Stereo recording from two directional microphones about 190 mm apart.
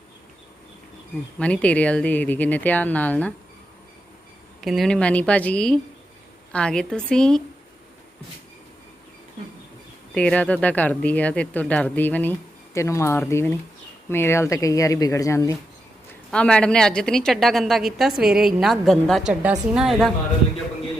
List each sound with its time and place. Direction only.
1.4 s speech: 5° left (ahead or behind)
4.6 s a woman's voice: centre (ahead or behind)
10.2 s speech: 5° left (ahead or behind)
16.3 s a woman's voice: 5° left (ahead or behind)